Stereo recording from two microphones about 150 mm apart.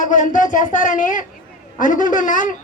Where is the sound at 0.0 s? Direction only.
55° left (ahead or behind).